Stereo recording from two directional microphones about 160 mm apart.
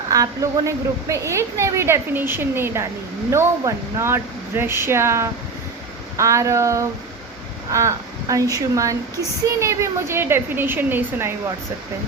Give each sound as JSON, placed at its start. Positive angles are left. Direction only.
{"t": 0.1, "sound": "a woman's voice", "side_deg": -20}